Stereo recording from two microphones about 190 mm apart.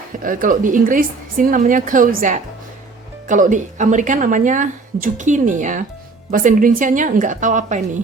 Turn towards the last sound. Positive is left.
turn(degrees=-40)  # may be behind; listen again after turning